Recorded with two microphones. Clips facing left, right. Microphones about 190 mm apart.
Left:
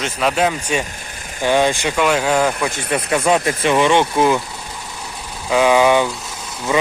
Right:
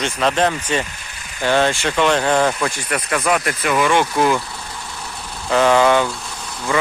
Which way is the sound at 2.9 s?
25° left (ahead or behind).